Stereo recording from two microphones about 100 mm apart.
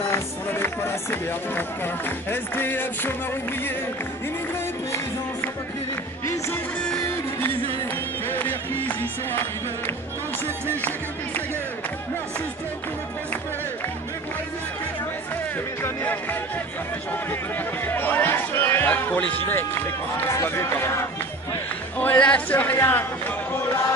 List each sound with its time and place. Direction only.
0.1 s music: 25° left (ahead or behind)
2.0 s music: 20° left (ahead or behind)
8.3 s music: 20° left (ahead or behind)
15.8 s music: 20° left (ahead or behind)
17.8 s speech: 20° left (ahead or behind)
19.4 s music: 20° left (ahead or behind)
21.9 s a woman's voice: 15° left (ahead or behind)
22.8 s music: 20° left (ahead or behind)